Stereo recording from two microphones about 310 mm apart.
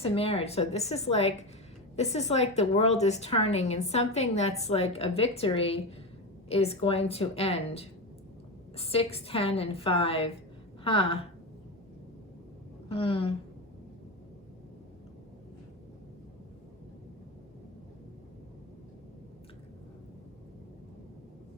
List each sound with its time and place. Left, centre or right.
0.0 s a woman's voice: centre
12.9 s a woman's voice: centre